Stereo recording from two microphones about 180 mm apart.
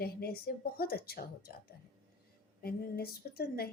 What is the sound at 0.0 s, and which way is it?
A woman's voice, 60° left (ahead or behind).